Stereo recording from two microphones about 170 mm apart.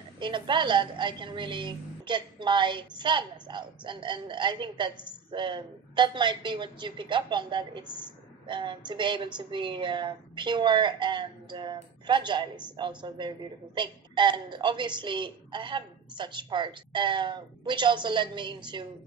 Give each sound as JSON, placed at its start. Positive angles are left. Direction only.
{"t": 0.2, "sound": "a woman's voice", "side_deg": -30}